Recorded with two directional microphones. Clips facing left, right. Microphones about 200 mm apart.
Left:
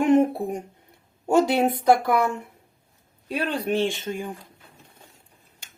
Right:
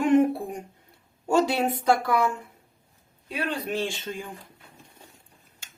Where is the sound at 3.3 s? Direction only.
25° left (ahead or behind).